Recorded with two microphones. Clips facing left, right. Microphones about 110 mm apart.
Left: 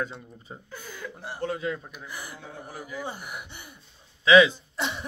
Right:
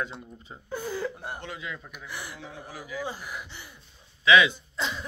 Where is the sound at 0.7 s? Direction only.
40° right (ahead or behind).